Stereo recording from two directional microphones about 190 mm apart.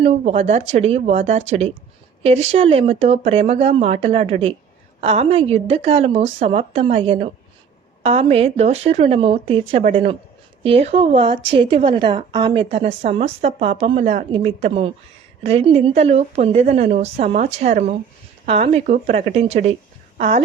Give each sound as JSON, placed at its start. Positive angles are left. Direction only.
{"t": 0.0, "sound": "a woman's voice", "side_deg": -30}